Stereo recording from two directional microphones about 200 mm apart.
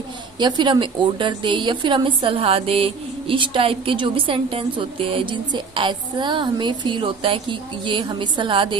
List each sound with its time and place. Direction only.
0.3 s a woman's voice: 20° right (ahead or behind)